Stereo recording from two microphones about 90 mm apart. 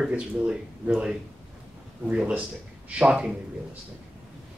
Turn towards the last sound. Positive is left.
turn(degrees=-10)  # may be behind; listen again after turning